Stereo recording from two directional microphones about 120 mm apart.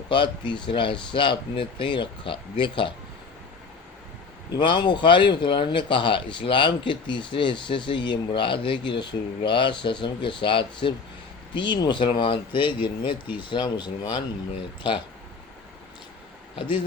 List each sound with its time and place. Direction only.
0.1 s speech: 40° left (ahead or behind)
4.5 s speech: 40° left (ahead or behind)
16.6 s speech: 45° left (ahead or behind)